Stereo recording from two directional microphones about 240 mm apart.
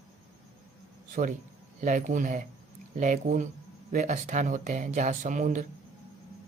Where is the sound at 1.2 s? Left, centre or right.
Right.